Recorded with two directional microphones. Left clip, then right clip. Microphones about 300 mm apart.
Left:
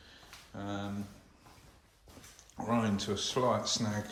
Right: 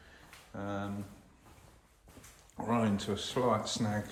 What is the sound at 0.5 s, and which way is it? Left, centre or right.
Speech, centre.